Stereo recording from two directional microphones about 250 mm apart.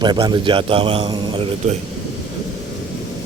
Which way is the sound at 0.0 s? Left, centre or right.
Centre.